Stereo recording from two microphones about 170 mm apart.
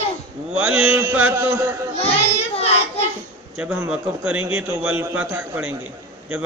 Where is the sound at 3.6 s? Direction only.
10° right (ahead or behind).